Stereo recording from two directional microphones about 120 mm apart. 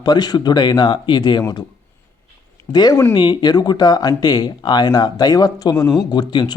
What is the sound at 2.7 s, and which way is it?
Speech, 35° left (ahead or behind).